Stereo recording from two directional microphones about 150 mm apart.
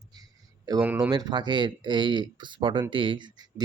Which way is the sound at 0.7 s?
25° right (ahead or behind).